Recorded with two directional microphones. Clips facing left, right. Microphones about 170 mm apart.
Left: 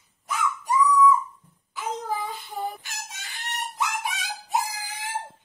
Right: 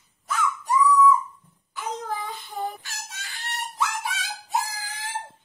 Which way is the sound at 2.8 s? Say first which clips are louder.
Even; 20° left (ahead or behind).